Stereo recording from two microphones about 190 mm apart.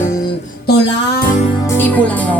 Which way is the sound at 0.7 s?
55° left (ahead or behind).